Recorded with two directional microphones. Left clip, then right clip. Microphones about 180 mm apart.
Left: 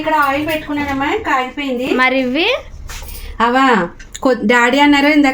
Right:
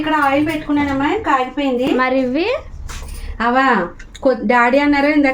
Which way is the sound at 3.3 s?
55° left (ahead or behind).